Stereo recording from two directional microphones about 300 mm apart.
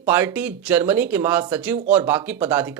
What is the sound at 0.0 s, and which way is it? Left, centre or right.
Speech, centre.